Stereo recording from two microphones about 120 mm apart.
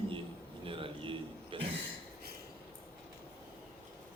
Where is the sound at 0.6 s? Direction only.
45° right (ahead or behind).